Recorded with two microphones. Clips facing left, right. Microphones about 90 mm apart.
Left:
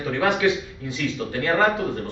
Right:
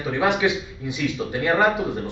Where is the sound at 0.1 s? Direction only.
15° right (ahead or behind).